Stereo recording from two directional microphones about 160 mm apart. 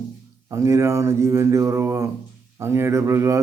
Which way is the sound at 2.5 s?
15° right (ahead or behind).